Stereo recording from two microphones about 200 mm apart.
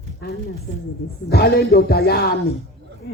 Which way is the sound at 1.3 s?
50° left (ahead or behind).